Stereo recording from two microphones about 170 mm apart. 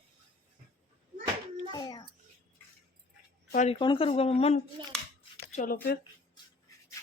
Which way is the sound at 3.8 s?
30° left (ahead or behind).